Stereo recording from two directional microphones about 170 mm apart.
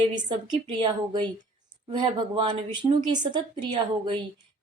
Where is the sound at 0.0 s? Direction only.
30° right (ahead or behind).